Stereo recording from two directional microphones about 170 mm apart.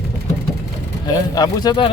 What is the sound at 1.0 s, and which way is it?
Speech, 25° left (ahead or behind).